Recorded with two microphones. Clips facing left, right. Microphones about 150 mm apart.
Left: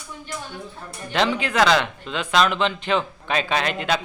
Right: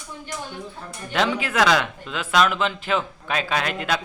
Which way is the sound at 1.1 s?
5° right (ahead or behind).